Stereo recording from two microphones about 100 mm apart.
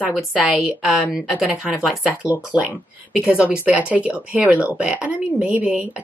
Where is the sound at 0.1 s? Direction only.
5° right (ahead or behind).